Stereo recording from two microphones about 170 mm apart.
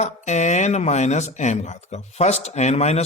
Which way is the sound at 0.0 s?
40° left (ahead or behind).